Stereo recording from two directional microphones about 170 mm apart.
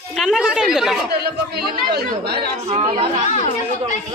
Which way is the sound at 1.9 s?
75° right (ahead or behind).